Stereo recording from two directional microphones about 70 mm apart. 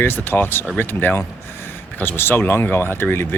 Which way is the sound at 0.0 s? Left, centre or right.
Left.